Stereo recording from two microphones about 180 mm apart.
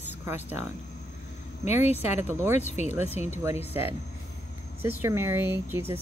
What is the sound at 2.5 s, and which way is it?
Speech, 40° left (ahead or behind).